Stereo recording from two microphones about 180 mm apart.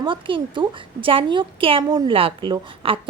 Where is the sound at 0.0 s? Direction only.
30° right (ahead or behind).